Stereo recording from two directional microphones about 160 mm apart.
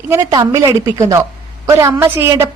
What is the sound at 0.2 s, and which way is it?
A woman's voice, 25° right (ahead or behind).